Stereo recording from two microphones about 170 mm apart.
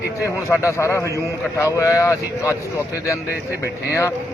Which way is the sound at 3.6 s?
15° left (ahead or behind).